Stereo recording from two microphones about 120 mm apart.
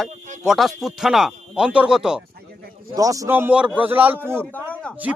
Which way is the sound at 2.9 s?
30° right (ahead or behind).